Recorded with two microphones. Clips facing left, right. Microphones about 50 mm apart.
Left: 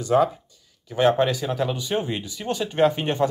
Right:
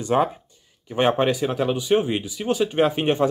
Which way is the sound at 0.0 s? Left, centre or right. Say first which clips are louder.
Left 1 dB; right.